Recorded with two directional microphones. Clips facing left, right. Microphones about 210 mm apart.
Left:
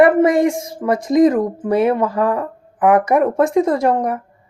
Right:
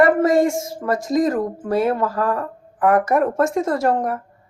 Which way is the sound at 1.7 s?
20° left (ahead or behind).